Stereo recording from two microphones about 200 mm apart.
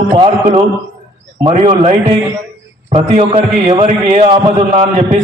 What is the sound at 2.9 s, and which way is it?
A man's voice, 30° right (ahead or behind).